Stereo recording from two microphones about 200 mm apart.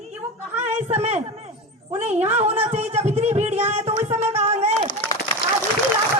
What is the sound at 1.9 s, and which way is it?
Speech, 35° right (ahead or behind).